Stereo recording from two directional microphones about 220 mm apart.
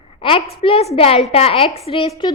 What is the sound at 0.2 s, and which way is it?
A woman's voice, 25° left (ahead or behind).